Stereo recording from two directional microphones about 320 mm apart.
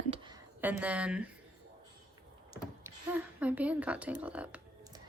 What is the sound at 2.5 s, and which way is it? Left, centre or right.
Speech, centre.